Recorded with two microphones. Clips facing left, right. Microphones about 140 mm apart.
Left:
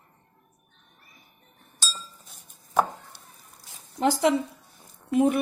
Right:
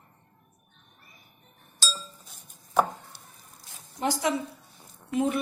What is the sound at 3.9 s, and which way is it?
A woman's voice, 65° left (ahead or behind).